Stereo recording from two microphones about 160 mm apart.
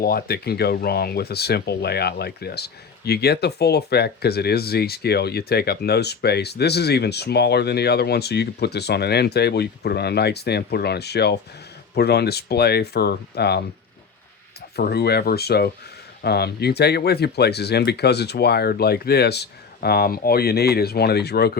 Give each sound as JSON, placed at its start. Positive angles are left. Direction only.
{"t": 0.0, "sound": "speech", "side_deg": 70}
{"t": 14.8, "sound": "speech", "side_deg": 80}